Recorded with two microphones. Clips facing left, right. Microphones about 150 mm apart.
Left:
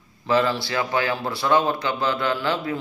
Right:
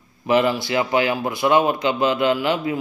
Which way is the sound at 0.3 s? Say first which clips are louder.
Right 3 dB; 15° right (ahead or behind).